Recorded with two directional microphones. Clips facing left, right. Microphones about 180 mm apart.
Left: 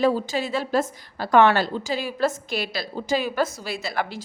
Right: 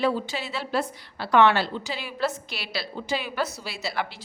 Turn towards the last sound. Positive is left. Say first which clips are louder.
# left 3 dB
turn(degrees=45)  # may be behind; listen again after turning